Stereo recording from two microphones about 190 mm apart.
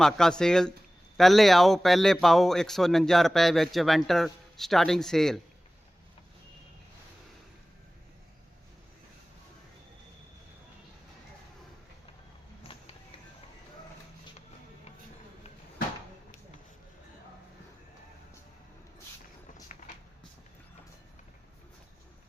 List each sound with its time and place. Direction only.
0.0 s speech: 5° left (ahead or behind)
12.6 s vehicle: 30° left (ahead or behind)
19.7 s a sound: 40° left (ahead or behind)